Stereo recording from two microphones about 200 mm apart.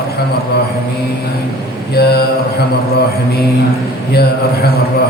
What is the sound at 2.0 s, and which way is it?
Speech, 55° left (ahead or behind).